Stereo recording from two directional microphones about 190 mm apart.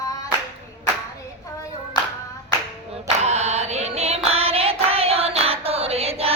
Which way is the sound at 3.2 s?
35° right (ahead or behind).